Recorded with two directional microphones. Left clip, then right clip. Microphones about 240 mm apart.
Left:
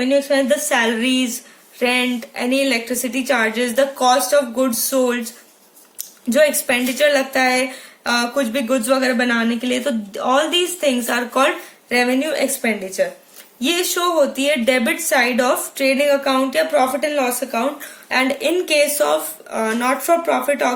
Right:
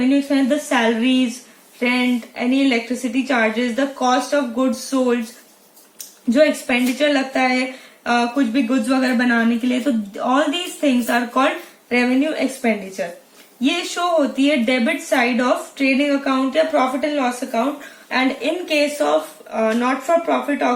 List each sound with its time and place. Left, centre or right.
0.3 s a woman's voice: left
6.3 s a woman's voice: left